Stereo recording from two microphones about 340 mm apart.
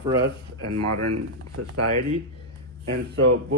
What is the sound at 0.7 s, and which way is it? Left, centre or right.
Speech, right.